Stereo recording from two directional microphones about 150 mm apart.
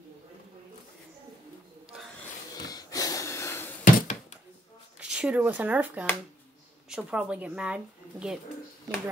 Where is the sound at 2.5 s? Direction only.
25° left (ahead or behind).